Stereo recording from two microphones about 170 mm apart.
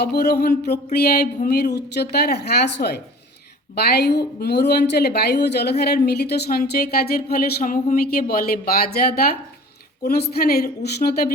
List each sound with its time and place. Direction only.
0.0 s a woman's voice: 70° left (ahead or behind)
3.8 s a woman's voice: 70° left (ahead or behind)